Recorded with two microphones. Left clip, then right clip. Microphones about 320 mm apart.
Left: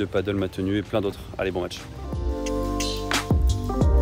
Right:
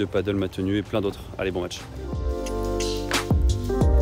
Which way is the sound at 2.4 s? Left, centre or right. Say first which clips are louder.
Even; centre.